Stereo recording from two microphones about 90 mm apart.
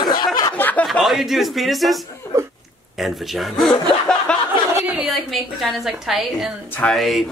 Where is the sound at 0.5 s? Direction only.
15° left (ahead or behind).